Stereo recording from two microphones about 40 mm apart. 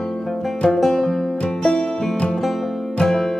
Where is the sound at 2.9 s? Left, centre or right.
Centre.